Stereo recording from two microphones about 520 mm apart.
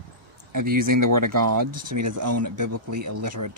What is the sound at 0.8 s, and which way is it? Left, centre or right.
Speech, right.